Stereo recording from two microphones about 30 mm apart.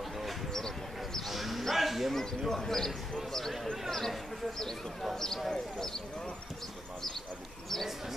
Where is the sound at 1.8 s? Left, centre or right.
Centre.